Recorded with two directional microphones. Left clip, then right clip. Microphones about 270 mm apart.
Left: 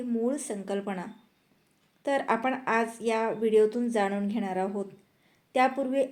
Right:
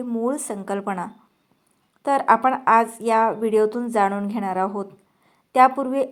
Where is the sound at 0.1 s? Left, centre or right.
Centre.